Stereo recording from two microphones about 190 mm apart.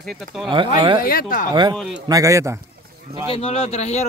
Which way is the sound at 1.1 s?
50° left (ahead or behind).